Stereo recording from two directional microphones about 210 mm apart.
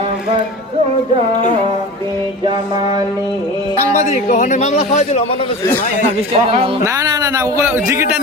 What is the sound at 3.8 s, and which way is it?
A man's voice, 30° left (ahead or behind).